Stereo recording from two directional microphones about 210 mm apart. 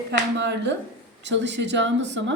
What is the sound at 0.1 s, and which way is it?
A woman's voice, 55° right (ahead or behind).